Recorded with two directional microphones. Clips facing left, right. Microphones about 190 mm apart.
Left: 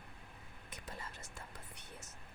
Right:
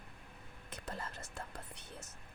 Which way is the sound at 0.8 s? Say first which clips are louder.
Right 5 dB; 65° right (ahead or behind).